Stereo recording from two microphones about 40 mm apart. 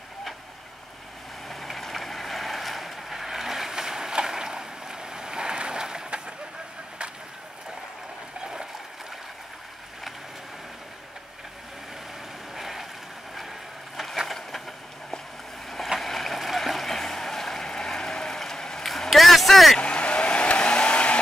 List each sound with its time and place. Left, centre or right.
1.5 s boat: centre; by 6.3 s right
12.5 s boat: centre
14.2 s a sound: centre
16.0 s boat: centre
18.9 s a sound: centre
19.8 s car: left